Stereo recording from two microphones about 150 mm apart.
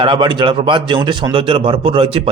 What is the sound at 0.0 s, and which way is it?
Speech, 35° right (ahead or behind).